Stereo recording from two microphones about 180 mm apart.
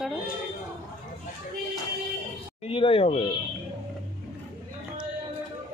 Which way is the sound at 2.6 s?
30° left (ahead or behind).